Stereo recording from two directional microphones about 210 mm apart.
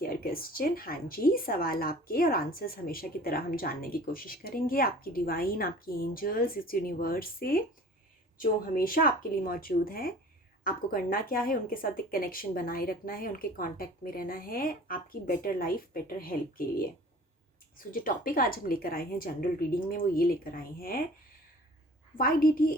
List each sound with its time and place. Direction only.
0.0 s speech: 45° left (ahead or behind)
22.2 s speech: 45° left (ahead or behind)